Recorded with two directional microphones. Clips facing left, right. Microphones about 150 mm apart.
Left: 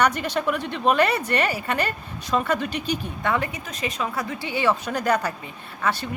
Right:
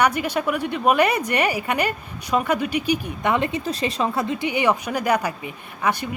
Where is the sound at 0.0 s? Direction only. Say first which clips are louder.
Right 1 dB; 10° right (ahead or behind).